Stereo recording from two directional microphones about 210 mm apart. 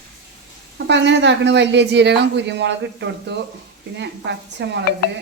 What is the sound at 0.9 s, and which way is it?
Speech, 55° right (ahead or behind).